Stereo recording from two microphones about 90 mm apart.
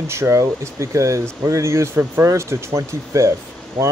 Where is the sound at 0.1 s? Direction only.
30° right (ahead or behind).